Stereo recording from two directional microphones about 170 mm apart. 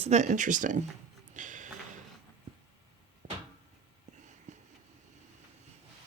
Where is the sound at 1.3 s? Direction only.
50° right (ahead or behind).